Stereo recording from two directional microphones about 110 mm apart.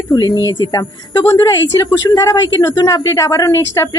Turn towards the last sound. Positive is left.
turn(degrees=25)  # may be behind; listen again after turning